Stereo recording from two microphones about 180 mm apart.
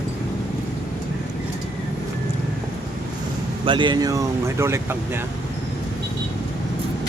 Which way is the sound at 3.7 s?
25° right (ahead or behind).